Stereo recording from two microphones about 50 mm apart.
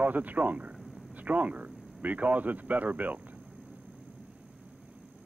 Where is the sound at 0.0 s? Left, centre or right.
Right.